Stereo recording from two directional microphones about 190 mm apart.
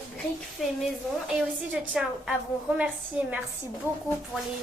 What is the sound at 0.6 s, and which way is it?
Speech, centre (ahead or behind).